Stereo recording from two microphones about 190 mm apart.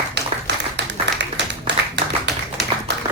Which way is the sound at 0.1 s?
65° right (ahead or behind).